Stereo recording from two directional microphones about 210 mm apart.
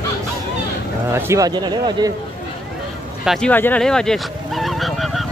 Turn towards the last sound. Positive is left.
turn(degrees=0)  # may be behind; listen again after turning